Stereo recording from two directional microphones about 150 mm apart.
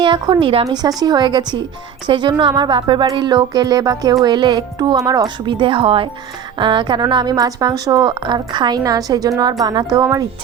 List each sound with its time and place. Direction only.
0.0 s speech: 30° right (ahead or behind)